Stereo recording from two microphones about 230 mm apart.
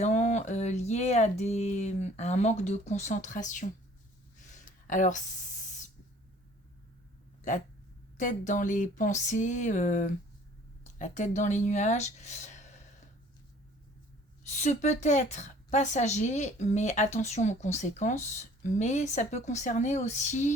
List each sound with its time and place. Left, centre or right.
0.0 s speech: left
4.4 s a sound: left
8.2 s a woman's voice: left
14.4 s a woman's voice: left